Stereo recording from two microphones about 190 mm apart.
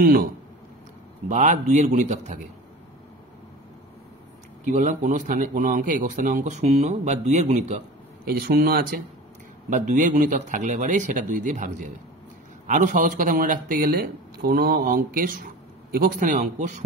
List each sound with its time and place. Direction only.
0.0 s speech: 50° right (ahead or behind)
1.3 s a man's voice: 40° right (ahead or behind)
4.7 s a man's voice: 40° right (ahead or behind)
8.3 s speech: 55° right (ahead or behind)
9.7 s a man's voice: 40° right (ahead or behind)